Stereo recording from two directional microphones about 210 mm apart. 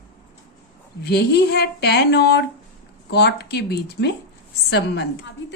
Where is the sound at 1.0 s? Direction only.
50° left (ahead or behind).